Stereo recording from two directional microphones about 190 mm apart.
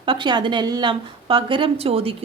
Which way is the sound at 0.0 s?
25° right (ahead or behind).